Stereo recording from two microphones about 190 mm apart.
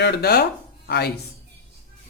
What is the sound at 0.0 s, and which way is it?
Speech, 55° left (ahead or behind).